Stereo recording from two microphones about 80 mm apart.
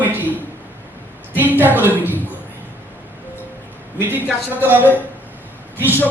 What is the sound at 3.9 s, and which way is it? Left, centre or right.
Speech, right.